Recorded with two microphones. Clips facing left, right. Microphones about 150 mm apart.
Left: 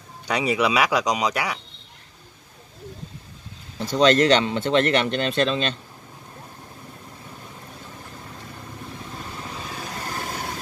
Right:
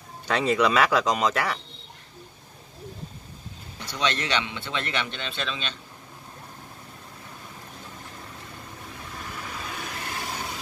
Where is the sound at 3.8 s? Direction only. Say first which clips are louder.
Left 12 dB; 45° left (ahead or behind).